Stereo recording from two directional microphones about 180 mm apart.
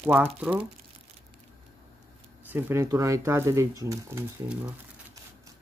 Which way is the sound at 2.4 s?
10° right (ahead or behind).